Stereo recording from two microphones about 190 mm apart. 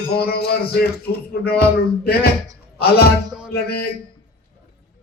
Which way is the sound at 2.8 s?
55° left (ahead or behind).